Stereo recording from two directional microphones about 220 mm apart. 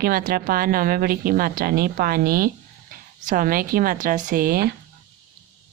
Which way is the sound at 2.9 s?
40° right (ahead or behind).